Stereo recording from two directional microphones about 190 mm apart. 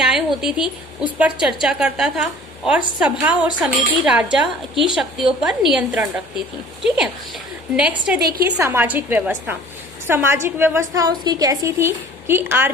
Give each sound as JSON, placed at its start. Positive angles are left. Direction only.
{"t": 0.0, "sound": "a woman's voice", "side_deg": -5}
{"t": 8.2, "sound": "a woman's voice", "side_deg": -50}
{"t": 8.4, "sound": "a woman's voice", "side_deg": -15}